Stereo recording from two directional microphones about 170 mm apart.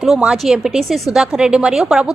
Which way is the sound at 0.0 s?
Centre (ahead or behind).